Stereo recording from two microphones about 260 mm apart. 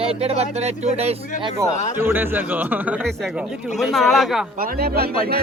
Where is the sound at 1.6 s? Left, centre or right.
Centre.